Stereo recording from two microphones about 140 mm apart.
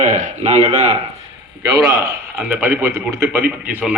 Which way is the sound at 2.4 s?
10° right (ahead or behind).